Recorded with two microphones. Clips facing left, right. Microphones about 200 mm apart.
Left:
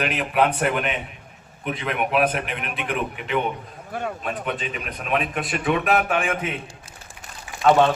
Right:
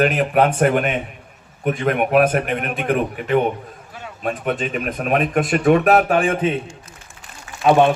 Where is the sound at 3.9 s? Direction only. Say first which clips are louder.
Left 9 dB; 55° left (ahead or behind).